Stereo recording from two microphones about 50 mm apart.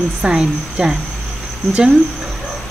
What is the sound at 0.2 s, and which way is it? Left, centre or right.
Speech, centre.